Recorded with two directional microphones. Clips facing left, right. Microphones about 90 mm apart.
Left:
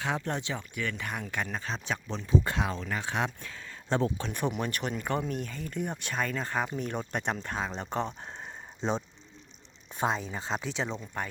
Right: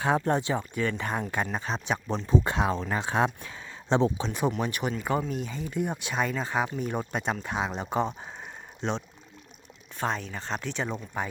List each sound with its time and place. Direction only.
0.0 s speech: 30° right (ahead or behind)
2.4 s speech: 30° right (ahead or behind)
4.3 s speech: 10° right (ahead or behind)
8.8 s speech: 5° left (ahead or behind)
10.0 s speech: 15° left (ahead or behind)
10.9 s speech: 10° right (ahead or behind)